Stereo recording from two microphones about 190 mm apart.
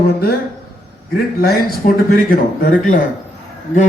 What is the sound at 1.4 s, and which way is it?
Speech, 50° left (ahead or behind).